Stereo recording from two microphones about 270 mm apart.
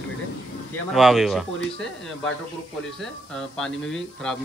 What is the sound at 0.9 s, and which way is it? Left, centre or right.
Speech, centre.